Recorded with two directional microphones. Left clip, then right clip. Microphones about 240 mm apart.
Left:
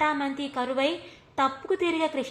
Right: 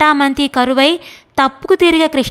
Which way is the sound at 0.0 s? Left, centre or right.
Right.